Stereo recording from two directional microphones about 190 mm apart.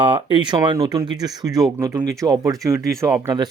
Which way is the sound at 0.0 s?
25° right (ahead or behind).